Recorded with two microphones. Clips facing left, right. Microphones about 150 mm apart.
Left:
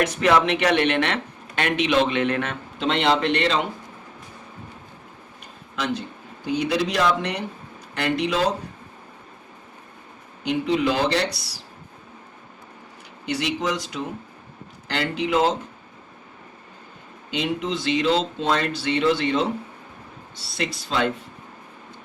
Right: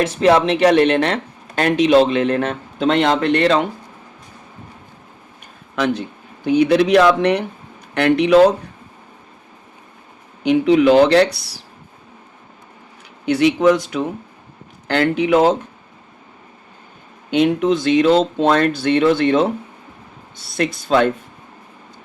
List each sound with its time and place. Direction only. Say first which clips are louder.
0.0 s speech: right 5 dB; 30° right (ahead or behind); by 3.7 s 50° right (ahead or behind)
5.7 s speech: right 7 dB; 60° right (ahead or behind)
10.4 s speech: right 9 dB; 65° right (ahead or behind)
13.2 s speech: right 12 dB; 60° right (ahead or behind)
17.3 s speech: right 10 dB; 55° right (ahead or behind)